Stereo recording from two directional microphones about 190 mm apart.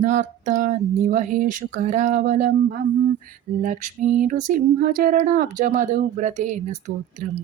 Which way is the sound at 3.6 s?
40° right (ahead or behind).